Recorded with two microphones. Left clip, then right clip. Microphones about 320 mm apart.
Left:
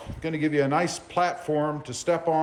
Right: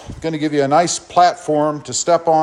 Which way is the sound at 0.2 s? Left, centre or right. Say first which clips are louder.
Right 7 dB; centre.